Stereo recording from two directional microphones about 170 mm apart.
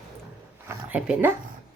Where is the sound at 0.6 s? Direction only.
10° right (ahead or behind).